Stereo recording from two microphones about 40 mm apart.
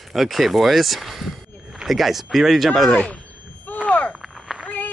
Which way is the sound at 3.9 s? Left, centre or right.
Left.